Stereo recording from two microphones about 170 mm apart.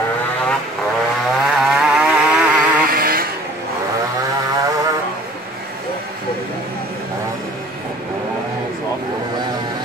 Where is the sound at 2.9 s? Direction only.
60° right (ahead or behind).